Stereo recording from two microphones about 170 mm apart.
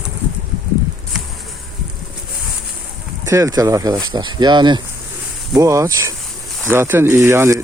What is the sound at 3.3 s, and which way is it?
Speech, 20° right (ahead or behind).